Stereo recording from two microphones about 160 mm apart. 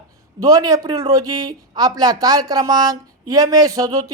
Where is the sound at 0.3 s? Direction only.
20° right (ahead or behind).